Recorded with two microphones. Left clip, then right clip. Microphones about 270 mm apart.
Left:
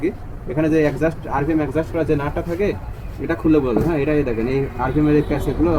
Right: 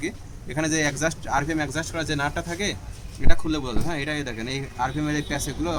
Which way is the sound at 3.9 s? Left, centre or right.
Right.